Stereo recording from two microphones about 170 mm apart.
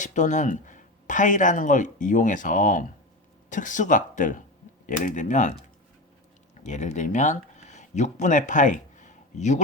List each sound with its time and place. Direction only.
0.0 s speech: 45° left (ahead or behind)